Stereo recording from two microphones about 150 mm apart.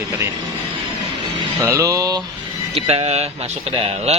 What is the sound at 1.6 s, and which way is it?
Speech, 20° right (ahead or behind).